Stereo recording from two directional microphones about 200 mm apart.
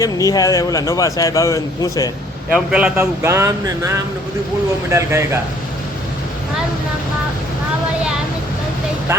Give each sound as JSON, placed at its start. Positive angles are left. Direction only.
{"t": 0.0, "sound": "a man's voice", "side_deg": 15}
{"t": 2.5, "sound": "speech", "side_deg": -5}